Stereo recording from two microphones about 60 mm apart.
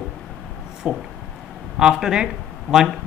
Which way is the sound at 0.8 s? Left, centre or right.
Right.